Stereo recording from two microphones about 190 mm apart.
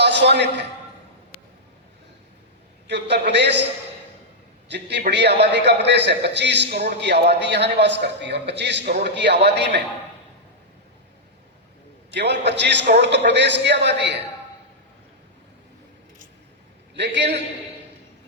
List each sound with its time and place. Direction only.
0.0 s a man's voice: 65° right (ahead or behind)
1.3 s a sound: 35° left (ahead or behind)
2.8 s a man's voice: 65° right (ahead or behind)
4.7 s a man's voice: 65° right (ahead or behind)
12.1 s a man's voice: 65° right (ahead or behind)
16.9 s a man's voice: 65° right (ahead or behind)